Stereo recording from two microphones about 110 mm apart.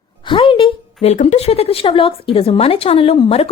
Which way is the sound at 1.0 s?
85° left.